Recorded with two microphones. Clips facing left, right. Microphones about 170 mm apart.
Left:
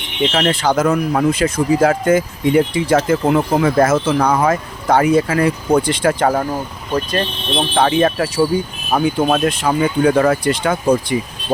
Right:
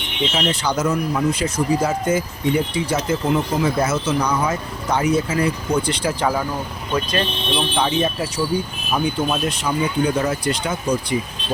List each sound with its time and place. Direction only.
0.3 s speech: 65° left (ahead or behind)
2.0 s speech: 55° left (ahead or behind)
2.7 s speech: 90° left
3.2 s speech: 55° left (ahead or behind)
6.9 s speech: 40° left (ahead or behind)
9.3 s speech: 70° left (ahead or behind)